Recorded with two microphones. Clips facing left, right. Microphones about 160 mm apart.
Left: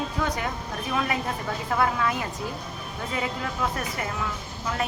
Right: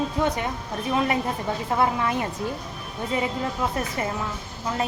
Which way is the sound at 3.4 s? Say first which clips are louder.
Right 3 dB; 25° right (ahead or behind).